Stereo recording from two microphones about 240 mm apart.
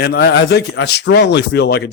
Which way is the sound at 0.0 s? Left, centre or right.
Left.